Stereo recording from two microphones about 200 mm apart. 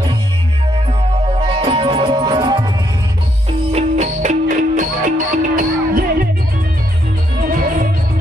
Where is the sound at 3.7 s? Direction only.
35° right (ahead or behind).